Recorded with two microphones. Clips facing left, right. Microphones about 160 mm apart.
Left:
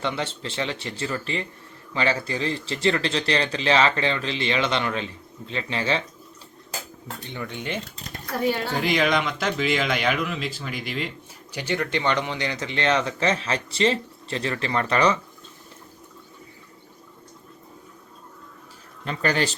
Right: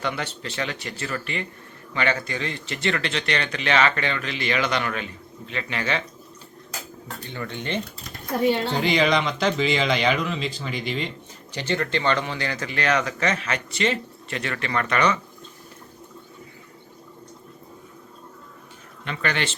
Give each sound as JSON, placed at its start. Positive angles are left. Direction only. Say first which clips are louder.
{"t": 0.0, "sound": "speech", "louder": "left 1 dB", "side_deg": 25}
{"t": 7.3, "sound": "speech", "louder": "right 1 dB", "side_deg": 15}
{"t": 8.3, "sound": "a woman's voice", "louder": "right 3 dB", "side_deg": -20}
{"t": 8.7, "sound": "speech", "louder": "right 1 dB", "side_deg": 0}
{"t": 19.0, "sound": "speech", "louder": "left 3 dB", "side_deg": 35}